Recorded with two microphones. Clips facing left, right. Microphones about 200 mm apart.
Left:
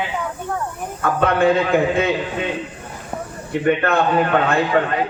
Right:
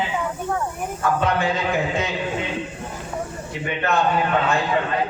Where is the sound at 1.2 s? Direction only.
55° left (ahead or behind).